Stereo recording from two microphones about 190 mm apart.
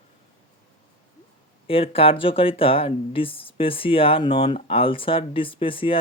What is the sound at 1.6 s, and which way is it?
Speech, 30° left (ahead or behind).